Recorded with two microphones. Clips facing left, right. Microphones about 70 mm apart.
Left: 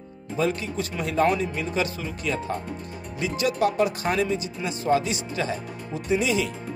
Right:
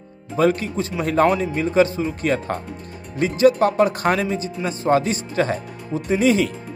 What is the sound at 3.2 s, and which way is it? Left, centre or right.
Speech, right.